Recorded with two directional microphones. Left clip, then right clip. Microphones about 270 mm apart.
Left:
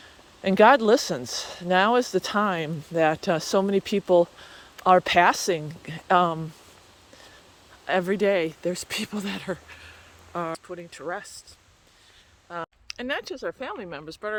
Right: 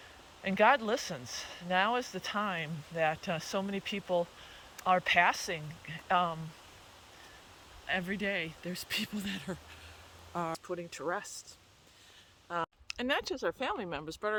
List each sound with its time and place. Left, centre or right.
0.4 s speech: left
7.9 s speech: centre
12.5 s speech: centre